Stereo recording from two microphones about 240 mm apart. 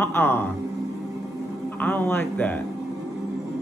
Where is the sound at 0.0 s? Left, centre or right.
Centre.